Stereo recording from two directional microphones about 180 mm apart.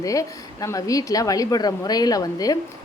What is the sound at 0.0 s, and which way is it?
A woman's voice, 20° left (ahead or behind).